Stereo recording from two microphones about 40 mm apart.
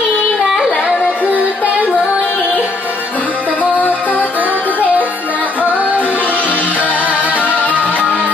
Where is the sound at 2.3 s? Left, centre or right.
Left.